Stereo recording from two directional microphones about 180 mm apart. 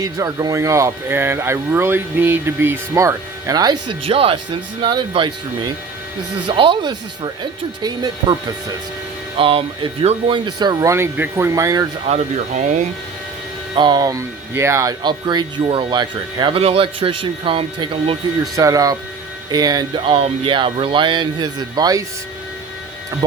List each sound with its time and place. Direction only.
0.0 s speech: 20° right (ahead or behind)
12.0 s speech: 40° right (ahead or behind)
13.7 s speech: 25° right (ahead or behind)